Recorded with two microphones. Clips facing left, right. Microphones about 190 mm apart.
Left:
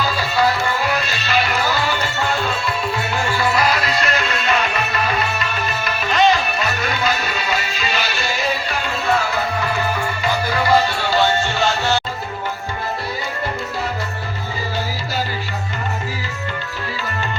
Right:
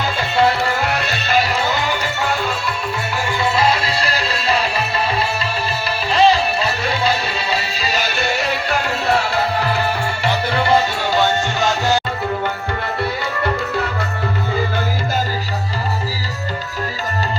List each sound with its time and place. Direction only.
0.0 s music: 25° right (ahead or behind)
0.8 s music: 70° right (ahead or behind)
1.4 s music: 30° right (ahead or behind)
3.4 s music: 25° right (ahead or behind); by 8.8 s 70° right (ahead or behind)
8.8 s music: 35° right (ahead or behind); by 11.9 s 20° right (ahead or behind)